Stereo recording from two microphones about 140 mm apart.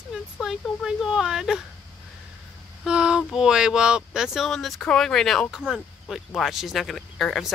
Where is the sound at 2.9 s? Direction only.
5° right (ahead or behind).